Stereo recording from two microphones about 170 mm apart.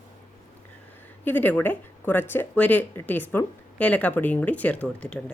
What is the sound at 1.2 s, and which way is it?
Speech, 10° left (ahead or behind).